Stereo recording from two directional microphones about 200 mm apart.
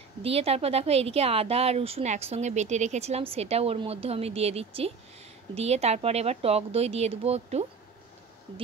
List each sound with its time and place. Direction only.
0.2 s speech: 30° right (ahead or behind)